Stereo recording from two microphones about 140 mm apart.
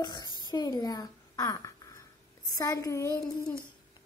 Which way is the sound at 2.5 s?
25° left (ahead or behind).